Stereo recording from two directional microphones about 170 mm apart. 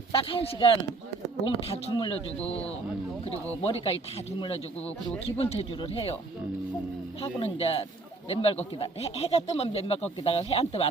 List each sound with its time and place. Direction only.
0.2 s speech: 35° left (ahead or behind)
3.3 s speech: 20° right (ahead or behind)
3.6 s speech: 35° left (ahead or behind)
7.2 s speech: 35° left (ahead or behind)